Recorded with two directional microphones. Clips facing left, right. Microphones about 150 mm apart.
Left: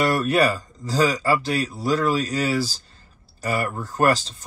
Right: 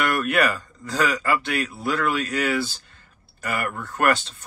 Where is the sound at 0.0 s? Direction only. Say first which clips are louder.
Left 3 dB; 35° left (ahead or behind).